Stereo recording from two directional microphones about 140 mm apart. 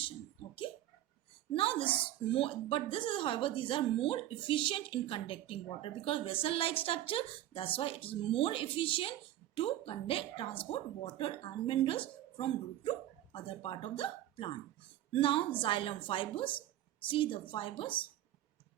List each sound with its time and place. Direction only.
1.5 s a woman's voice: 40° left (ahead or behind)